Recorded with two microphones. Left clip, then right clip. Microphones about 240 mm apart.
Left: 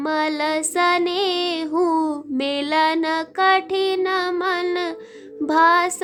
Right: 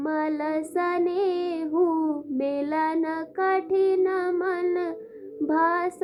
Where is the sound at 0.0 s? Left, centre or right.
Left.